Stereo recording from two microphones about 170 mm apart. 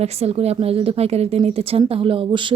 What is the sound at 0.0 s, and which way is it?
Speech, 40° right (ahead or behind).